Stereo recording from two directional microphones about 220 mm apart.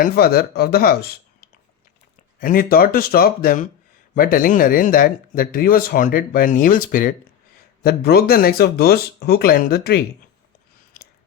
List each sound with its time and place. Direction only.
0.0 s speech: 45° left (ahead or behind)